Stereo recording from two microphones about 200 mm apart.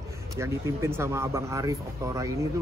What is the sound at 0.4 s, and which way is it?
Speech, 10° right (ahead or behind).